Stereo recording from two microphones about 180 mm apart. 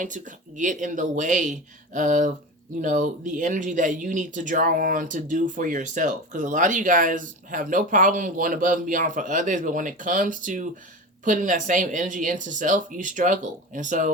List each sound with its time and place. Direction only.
0.0 s speech: 45° right (ahead or behind)